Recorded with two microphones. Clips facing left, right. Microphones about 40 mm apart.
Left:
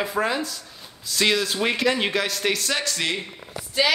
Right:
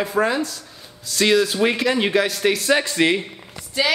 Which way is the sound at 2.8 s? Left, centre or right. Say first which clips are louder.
Right 7 dB; right.